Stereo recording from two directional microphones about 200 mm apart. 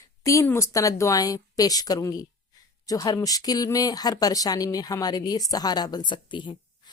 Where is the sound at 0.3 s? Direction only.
15° left (ahead or behind).